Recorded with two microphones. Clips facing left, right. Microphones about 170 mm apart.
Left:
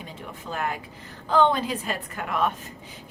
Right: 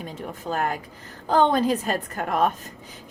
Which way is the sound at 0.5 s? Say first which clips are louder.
Right 3 dB; 45° right (ahead or behind).